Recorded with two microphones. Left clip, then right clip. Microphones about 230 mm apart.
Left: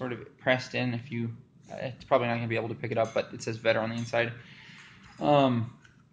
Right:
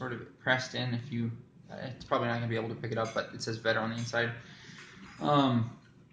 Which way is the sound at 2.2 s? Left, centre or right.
Left.